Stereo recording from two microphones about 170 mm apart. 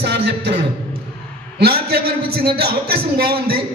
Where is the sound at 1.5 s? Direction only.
70° right (ahead or behind).